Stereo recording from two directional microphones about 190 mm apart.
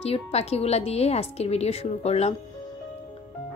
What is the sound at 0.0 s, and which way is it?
Speech, 30° left (ahead or behind).